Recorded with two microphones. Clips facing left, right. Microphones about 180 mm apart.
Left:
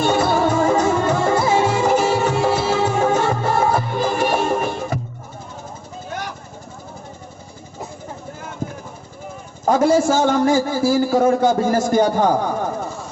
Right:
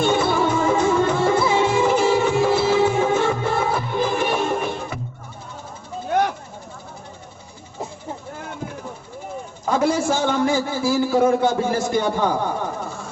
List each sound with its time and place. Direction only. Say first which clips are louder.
0.0 s music: left 2 dB; 45° left (ahead or behind)
9.6 s a man's voice: left 5 dB; 45° left (ahead or behind)